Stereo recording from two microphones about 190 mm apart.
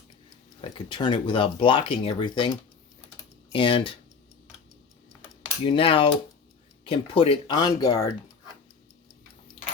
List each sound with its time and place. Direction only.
0.6 s speech: 25° left (ahead or behind)
5.6 s speech: 25° left (ahead or behind)